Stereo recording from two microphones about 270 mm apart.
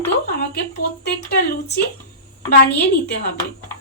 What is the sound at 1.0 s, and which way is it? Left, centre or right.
Speech, left.